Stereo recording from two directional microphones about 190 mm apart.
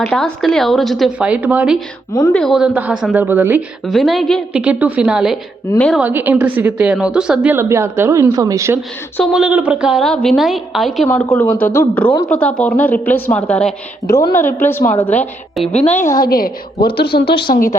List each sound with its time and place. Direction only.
0.0 s a woman's voice: centre (ahead or behind)
6.0 s a woman's voice: 10° right (ahead or behind)
9.1 s a woman's voice: centre (ahead or behind)
16.1 s a woman's voice: 50° left (ahead or behind)
17.5 s a woman's voice: 45° left (ahead or behind)